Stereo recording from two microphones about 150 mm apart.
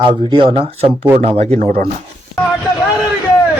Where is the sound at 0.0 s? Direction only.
35° right (ahead or behind).